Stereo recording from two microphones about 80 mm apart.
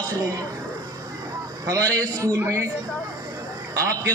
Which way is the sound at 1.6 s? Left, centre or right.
Right.